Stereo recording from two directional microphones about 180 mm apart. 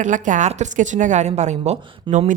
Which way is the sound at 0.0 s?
45° right (ahead or behind).